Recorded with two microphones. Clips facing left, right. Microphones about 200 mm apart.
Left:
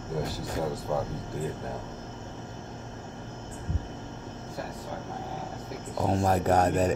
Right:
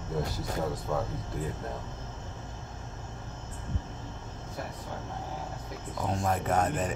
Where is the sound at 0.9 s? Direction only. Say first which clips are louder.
Left 2 dB; 5° left (ahead or behind).